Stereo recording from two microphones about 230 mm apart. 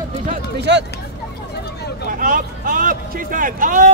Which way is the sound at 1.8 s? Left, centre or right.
Left.